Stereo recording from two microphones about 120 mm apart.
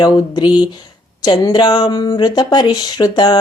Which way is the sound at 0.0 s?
40° left (ahead or behind).